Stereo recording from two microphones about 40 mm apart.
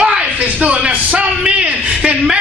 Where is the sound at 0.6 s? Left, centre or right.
Right.